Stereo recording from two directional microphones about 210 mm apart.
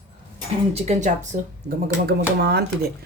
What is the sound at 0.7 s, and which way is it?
Speech, 30° right (ahead or behind).